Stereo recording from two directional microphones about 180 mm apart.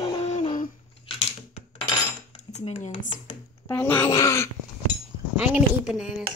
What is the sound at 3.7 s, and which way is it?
Speech, 10° left (ahead or behind).